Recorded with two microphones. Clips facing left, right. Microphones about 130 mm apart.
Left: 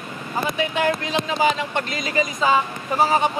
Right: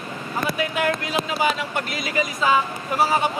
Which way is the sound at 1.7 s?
5° right (ahead or behind).